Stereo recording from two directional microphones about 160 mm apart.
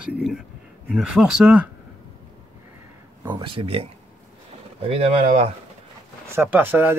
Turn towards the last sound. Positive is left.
turn(degrees=-10)  # may be behind; listen again after turning